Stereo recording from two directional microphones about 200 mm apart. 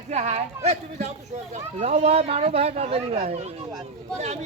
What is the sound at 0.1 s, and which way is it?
Speech, 35° right (ahead or behind).